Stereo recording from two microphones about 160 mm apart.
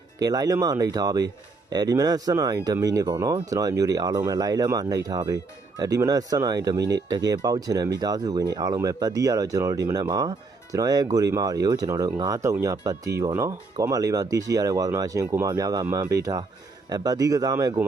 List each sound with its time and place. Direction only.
0.2 s speech: 25° right (ahead or behind)